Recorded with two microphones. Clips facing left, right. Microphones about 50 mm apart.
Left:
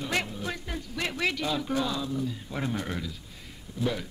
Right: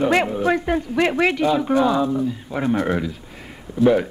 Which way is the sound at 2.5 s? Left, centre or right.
Right.